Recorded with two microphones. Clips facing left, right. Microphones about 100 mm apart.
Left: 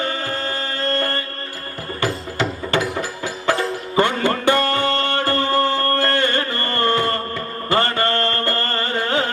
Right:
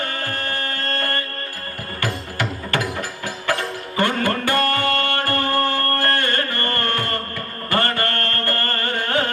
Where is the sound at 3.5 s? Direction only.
20° left (ahead or behind).